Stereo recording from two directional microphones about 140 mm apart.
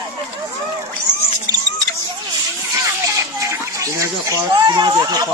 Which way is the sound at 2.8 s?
25° right (ahead or behind).